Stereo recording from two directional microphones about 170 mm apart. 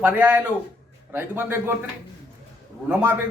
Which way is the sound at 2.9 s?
10° right (ahead or behind).